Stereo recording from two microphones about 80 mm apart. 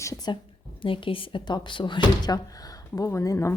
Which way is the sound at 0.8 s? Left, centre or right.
Left.